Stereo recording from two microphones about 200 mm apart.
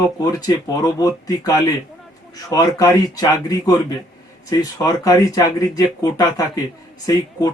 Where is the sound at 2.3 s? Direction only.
20° left (ahead or behind).